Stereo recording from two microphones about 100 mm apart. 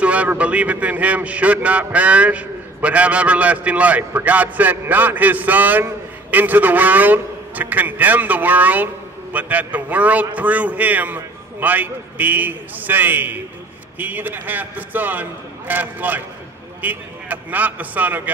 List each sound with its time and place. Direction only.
0.0 s a man's voice: 15° right (ahead or behind)